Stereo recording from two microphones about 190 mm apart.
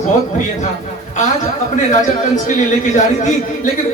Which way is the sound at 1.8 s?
40° left (ahead or behind).